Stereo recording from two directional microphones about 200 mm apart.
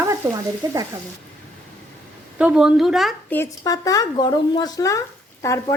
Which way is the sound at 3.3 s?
15° left (ahead or behind).